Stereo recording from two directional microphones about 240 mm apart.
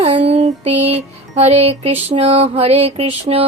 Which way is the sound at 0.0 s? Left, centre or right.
Right.